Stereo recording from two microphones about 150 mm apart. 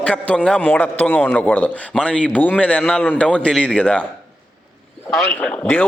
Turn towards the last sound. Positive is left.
turn(degrees=10)  # may be behind; listen again after turning